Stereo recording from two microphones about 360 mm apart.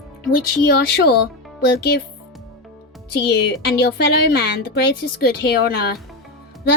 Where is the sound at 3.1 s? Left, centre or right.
Left.